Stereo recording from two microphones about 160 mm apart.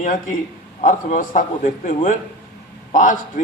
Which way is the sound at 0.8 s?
50° left (ahead or behind).